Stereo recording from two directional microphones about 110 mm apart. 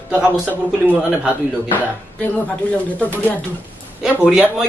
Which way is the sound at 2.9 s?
15° left (ahead or behind).